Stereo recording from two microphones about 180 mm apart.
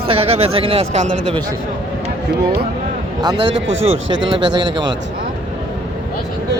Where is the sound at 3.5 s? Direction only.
90° right.